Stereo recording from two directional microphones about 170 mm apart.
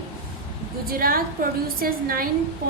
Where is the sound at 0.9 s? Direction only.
55° right (ahead or behind).